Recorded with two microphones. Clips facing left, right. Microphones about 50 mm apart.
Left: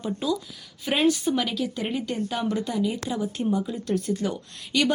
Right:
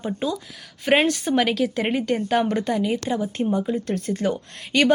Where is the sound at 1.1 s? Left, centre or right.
Right.